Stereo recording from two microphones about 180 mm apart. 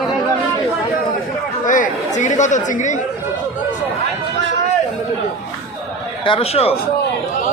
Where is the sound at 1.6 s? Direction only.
45° left (ahead or behind).